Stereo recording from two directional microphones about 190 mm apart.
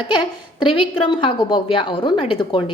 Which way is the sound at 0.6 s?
25° left (ahead or behind).